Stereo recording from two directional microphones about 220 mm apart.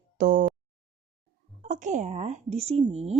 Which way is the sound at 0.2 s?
35° right (ahead or behind).